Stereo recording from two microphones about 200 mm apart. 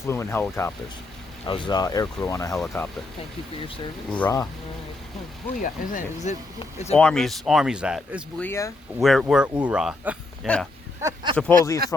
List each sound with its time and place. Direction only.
0.1 s speech: 10° left (ahead or behind)
1.5 s speech: 25° left (ahead or behind)
2.6 s speech: 5° left (ahead or behind)
4.1 s speech: 10° left (ahead or behind)
5.5 s speech: 40° left (ahead or behind)
6.9 s speech: 5° left (ahead or behind)
8.4 s speech: 10° left (ahead or behind)
9.0 s speech: centre (ahead or behind)
11.0 s a sound: 20° right (ahead or behind)
11.3 s speech: 10° left (ahead or behind)